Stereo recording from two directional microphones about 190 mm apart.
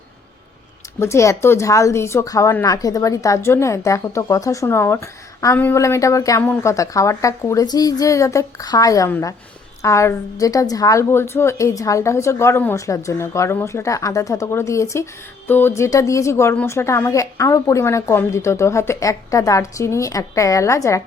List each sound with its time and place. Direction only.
0.9 s a woman's voice: 15° left (ahead or behind)